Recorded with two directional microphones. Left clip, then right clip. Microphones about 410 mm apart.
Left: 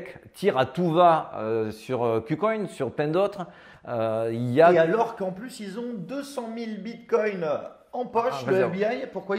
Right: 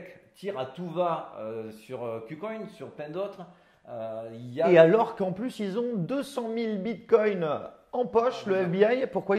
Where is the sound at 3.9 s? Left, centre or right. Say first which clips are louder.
Left 10 dB; left.